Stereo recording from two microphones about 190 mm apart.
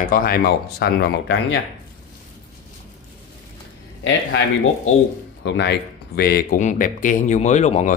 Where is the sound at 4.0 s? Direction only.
85° left.